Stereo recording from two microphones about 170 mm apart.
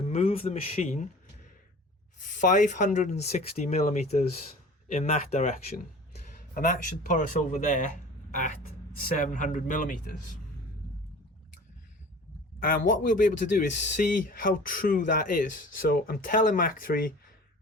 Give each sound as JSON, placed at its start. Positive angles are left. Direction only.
{"t": 0.1, "sound": "speech", "side_deg": 35}
{"t": 2.4, "sound": "speech", "side_deg": 50}
{"t": 12.5, "sound": "speech", "side_deg": 55}